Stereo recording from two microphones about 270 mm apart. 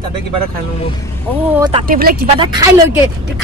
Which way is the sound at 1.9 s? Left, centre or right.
Right.